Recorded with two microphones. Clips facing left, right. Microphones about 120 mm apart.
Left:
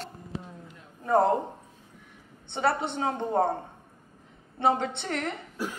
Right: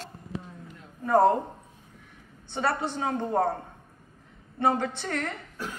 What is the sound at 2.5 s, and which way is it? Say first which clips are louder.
A woman's voice: left 1 dB; 20° left (ahead or behind).